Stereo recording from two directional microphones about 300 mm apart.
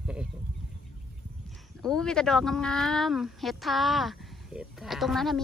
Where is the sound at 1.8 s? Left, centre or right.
Centre.